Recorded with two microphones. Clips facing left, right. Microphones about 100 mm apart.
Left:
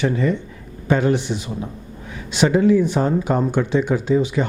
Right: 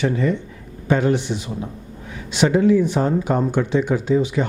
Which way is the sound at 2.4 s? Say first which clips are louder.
Even; 15° left (ahead or behind).